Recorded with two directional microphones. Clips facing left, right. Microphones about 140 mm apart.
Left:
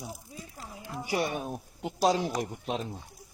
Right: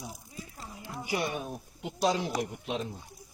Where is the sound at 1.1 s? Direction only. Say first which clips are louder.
Left 2 dB; 45° left (ahead or behind).